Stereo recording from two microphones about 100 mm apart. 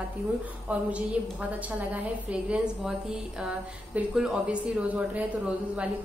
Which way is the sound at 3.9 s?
5° right (ahead or behind).